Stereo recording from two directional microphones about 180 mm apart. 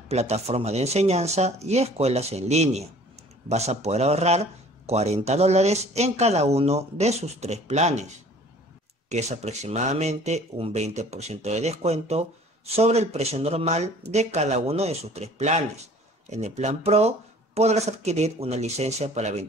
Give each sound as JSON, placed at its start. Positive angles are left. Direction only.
{"t": 0.1, "sound": "speech", "side_deg": -35}
{"t": 9.1, "sound": "speech", "side_deg": -40}